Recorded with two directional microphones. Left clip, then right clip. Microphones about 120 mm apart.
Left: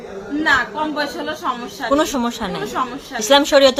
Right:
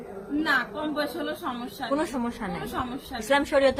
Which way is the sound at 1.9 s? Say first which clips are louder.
Left 11 dB; 25° left (ahead or behind).